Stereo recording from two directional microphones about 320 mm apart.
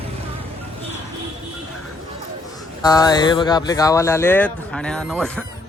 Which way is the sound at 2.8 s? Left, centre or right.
Centre.